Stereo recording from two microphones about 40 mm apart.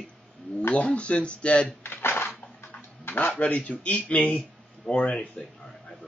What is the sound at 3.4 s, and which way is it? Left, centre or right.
Speech, left.